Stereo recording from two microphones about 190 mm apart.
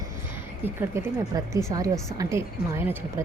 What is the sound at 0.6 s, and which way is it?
A woman's voice, 15° right (ahead or behind).